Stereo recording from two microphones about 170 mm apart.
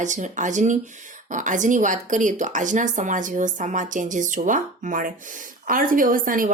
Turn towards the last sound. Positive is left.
turn(degrees=-55)  # may be behind; listen again after turning